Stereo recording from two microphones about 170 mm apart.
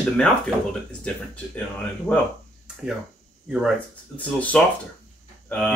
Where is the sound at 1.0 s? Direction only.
5° left (ahead or behind).